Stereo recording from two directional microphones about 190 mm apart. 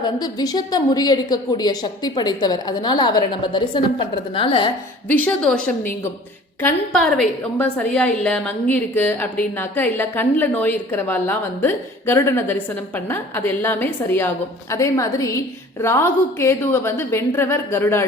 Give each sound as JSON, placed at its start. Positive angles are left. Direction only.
{"t": 0.0, "sound": "a woman's voice", "side_deg": 20}
{"t": 5.0, "sound": "a woman's voice", "side_deg": 10}
{"t": 6.6, "sound": "a woman's voice", "side_deg": 5}